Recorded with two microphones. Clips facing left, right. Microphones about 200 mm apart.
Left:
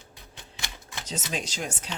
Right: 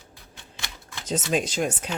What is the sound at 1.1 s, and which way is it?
Speech, 50° right (ahead or behind).